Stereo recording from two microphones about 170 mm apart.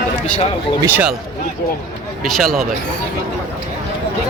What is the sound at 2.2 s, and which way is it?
Speech, centre (ahead or behind).